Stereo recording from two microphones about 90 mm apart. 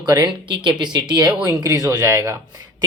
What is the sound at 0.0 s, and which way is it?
Speech, 50° right (ahead or behind).